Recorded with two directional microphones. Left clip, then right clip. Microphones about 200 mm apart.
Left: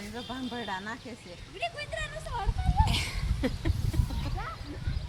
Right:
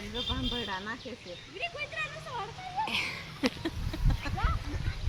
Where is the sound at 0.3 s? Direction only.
40° left (ahead or behind).